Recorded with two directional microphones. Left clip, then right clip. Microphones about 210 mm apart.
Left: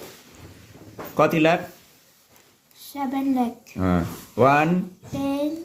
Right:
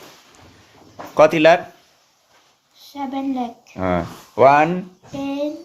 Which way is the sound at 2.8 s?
40° left (ahead or behind).